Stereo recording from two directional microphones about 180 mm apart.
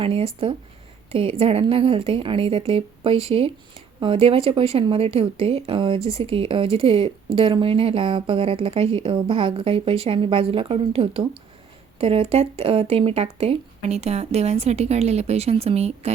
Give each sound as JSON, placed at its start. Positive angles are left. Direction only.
{"t": 0.0, "sound": "a woman's voice", "side_deg": -30}